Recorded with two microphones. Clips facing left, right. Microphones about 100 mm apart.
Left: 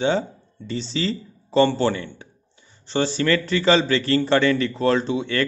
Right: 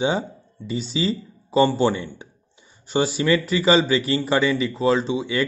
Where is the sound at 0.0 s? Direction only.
10° right (ahead or behind).